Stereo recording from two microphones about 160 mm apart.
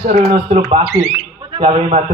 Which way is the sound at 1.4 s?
35° right (ahead or behind).